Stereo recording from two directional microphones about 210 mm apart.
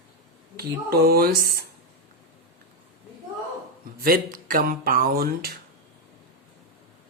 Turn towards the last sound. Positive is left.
turn(degrees=-45)  # may be behind; listen again after turning